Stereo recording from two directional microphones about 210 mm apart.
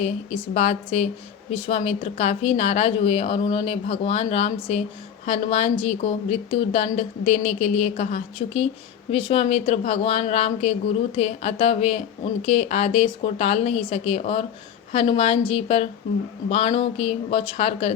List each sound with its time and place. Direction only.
0.0 s a woman's voice: 30° left (ahead or behind)